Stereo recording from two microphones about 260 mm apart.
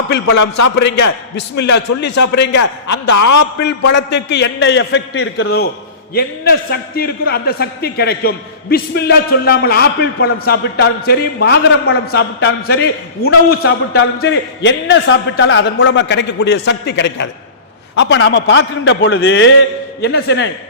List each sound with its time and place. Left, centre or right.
0.3 s a man's voice: left
0.8 s a man's voice: left
2.9 s a man's voice: left
3.3 s a man's voice: left